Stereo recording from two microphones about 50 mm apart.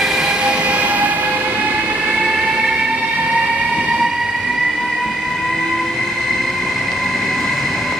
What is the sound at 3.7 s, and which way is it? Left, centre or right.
Train, centre.